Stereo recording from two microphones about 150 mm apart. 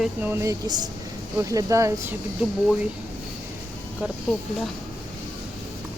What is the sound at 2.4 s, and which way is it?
Speech, 5° right (ahead or behind).